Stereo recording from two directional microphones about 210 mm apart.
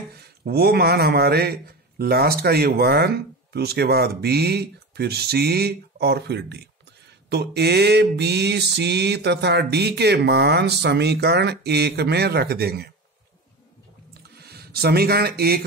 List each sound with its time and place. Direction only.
0.1 s a man's voice: 50° right (ahead or behind)
3.5 s a sound: 50° right (ahead or behind)
14.4 s speech: 50° right (ahead or behind)